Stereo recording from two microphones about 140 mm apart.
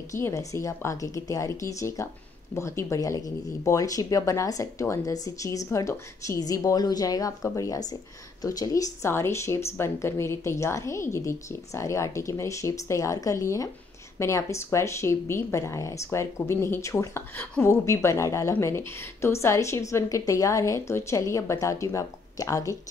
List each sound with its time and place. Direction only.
0.1 s speech: 25° left (ahead or behind)